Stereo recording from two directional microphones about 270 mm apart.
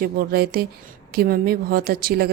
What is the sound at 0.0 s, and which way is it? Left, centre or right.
Speech, right.